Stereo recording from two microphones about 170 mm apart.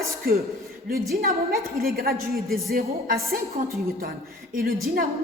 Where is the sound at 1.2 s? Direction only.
60° right (ahead or behind).